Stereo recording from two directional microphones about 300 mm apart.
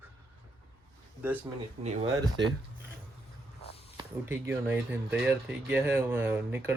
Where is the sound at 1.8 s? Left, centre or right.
Right.